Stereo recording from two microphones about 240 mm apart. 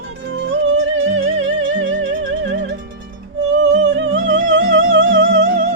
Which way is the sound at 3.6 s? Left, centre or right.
Right.